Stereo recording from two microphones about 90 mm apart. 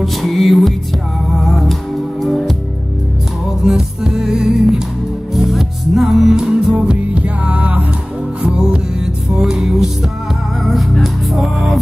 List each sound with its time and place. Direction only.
0.0 s music: centre (ahead or behind)
3.6 s music: 5° right (ahead or behind)